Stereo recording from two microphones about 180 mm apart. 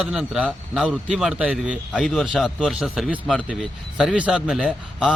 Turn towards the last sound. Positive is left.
turn(degrees=-5)  # may be behind; listen again after turning